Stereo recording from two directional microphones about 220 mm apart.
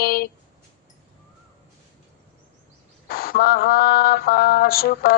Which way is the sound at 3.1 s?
45° left (ahead or behind).